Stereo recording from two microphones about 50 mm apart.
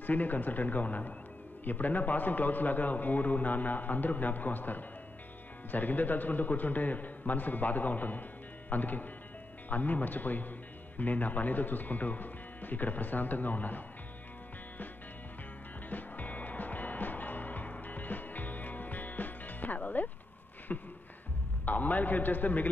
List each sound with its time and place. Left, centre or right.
0.0 s a man's voice: left
15.9 s music: left
20.7 s beatboxing: left
21.6 s a man's voice: left